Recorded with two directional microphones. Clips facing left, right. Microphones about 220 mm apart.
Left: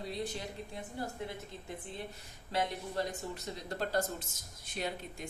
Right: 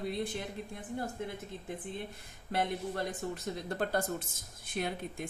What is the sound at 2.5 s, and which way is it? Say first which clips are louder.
Speech: right 2 dB; 55° right (ahead or behind).